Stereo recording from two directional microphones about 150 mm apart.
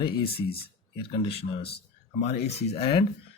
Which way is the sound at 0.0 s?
35° left (ahead or behind).